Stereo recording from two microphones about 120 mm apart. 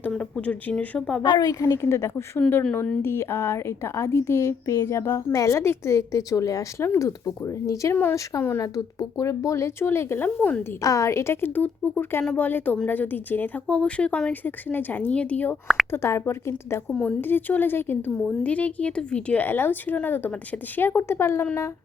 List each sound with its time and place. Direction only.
0.1 s speech: 5° left (ahead or behind)
1.2 s a woman's voice: 35° left (ahead or behind); by 8.6 s 20° left (ahead or behind)
8.6 s a woman's voice: 30° left (ahead or behind); by 10.6 s 15° left (ahead or behind)
10.8 s a woman's voice: 25° left (ahead or behind)
15.6 s speech: centre (ahead or behind)
15.9 s a woman's voice: 20° left (ahead or behind)
16.9 s a woman's voice: 10° left (ahead or behind)